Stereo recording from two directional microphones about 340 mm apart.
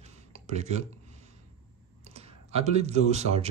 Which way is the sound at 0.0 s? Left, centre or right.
Centre.